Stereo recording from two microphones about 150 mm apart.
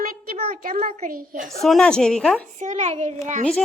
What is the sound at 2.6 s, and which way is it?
Speech, 50° right (ahead or behind).